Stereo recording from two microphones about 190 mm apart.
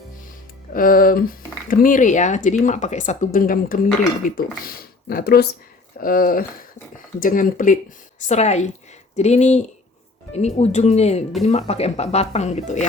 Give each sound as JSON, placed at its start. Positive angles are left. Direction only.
{"t": 0.7, "sound": "speech", "side_deg": 50}